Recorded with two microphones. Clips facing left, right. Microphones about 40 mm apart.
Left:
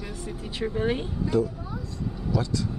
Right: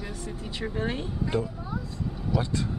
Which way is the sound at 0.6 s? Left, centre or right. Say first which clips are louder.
Left 4 dB; centre.